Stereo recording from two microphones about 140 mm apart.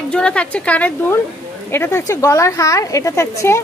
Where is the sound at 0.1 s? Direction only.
10° left (ahead or behind).